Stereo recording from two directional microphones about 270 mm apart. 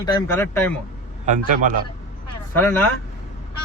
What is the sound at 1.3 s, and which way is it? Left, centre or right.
Speech, right.